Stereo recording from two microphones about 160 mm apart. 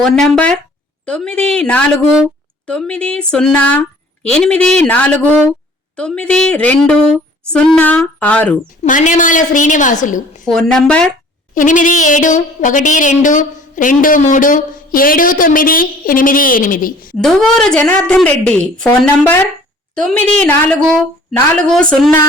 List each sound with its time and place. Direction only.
0.0 s a woman's voice: 5° left (ahead or behind)
8.8 s a woman's voice: 50° left (ahead or behind)
10.4 s a woman's voice: 5° left (ahead or behind)
11.5 s a sound: 55° left (ahead or behind)
17.2 s a woman's voice: centre (ahead or behind)
20.0 s a woman's voice: 5° left (ahead or behind)